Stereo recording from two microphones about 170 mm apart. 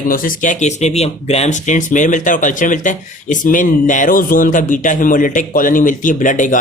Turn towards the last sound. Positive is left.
turn(degrees=50)  # may be behind; listen again after turning